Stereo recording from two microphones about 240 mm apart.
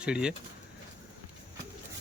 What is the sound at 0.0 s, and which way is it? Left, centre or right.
Speech, centre.